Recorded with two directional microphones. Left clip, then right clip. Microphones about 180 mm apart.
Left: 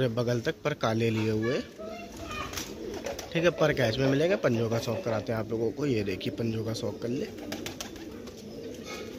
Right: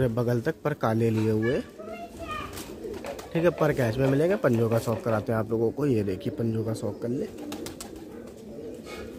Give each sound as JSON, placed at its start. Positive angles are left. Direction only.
{"t": 0.0, "sound": "speech", "side_deg": -45}
{"t": 3.6, "sound": "speech", "side_deg": -45}
{"t": 4.6, "sound": "speech", "side_deg": -55}